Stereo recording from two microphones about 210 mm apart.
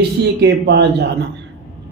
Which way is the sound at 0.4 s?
55° right (ahead or behind).